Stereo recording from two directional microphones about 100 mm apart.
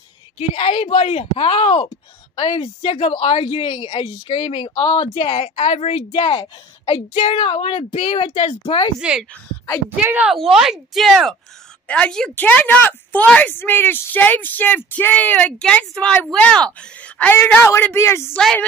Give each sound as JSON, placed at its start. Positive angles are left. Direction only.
{"t": 0.4, "sound": "a woman's voice", "side_deg": 90}
{"t": 4.6, "sound": "speech", "side_deg": 40}
{"t": 4.9, "sound": "a woman's voice", "side_deg": 65}
{"t": 6.3, "sound": "a woman's voice", "side_deg": 50}
{"t": 7.2, "sound": "speech", "side_deg": 80}
{"t": 9.8, "sound": "a woman's voice", "side_deg": -20}
{"t": 10.3, "sound": "speech", "side_deg": -5}
{"t": 17.6, "sound": "speech", "side_deg": 25}